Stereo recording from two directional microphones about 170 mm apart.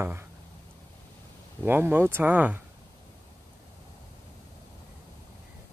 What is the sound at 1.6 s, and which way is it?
Speech, 10° right (ahead or behind).